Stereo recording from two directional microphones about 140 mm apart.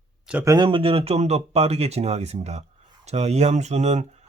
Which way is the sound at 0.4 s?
35° right (ahead or behind).